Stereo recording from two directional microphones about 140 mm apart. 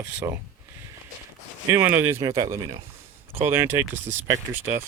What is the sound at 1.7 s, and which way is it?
Speech, 15° right (ahead or behind).